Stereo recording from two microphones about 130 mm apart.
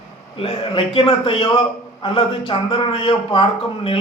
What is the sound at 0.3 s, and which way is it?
A man's voice, 45° left (ahead or behind).